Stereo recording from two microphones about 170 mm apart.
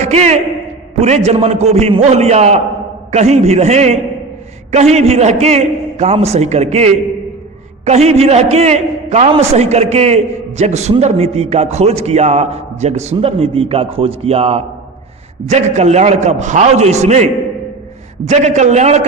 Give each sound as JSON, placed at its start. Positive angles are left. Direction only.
{"t": 0.0, "sound": "a man's voice", "side_deg": -40}
{"t": 18.3, "sound": "a man's voice", "side_deg": -45}